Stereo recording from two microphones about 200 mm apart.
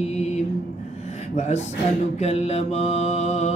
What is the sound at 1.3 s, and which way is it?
Speech, 35° left (ahead or behind).